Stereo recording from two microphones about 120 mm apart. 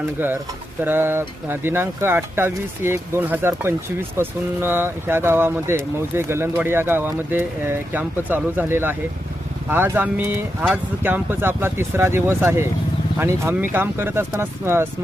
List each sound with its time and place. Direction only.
0.8 s speech: 15° right (ahead or behind)